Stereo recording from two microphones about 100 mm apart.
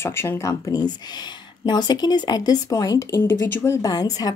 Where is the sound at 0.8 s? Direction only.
45° left (ahead or behind).